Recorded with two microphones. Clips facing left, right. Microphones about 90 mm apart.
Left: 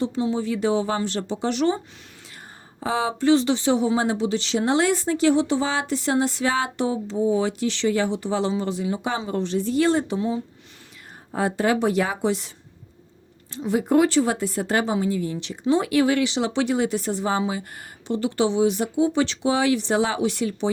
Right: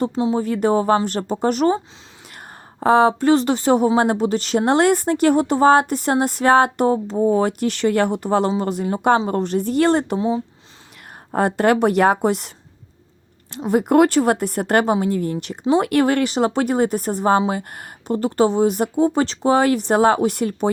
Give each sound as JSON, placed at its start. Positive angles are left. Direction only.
{"t": 0.0, "sound": "speech", "side_deg": -50}
{"t": 2.8, "sound": "speech", "side_deg": -55}
{"t": 10.2, "sound": "speech", "side_deg": -30}
{"t": 11.3, "sound": "a woman's voice", "side_deg": -55}
{"t": 13.6, "sound": "a woman's voice", "side_deg": -55}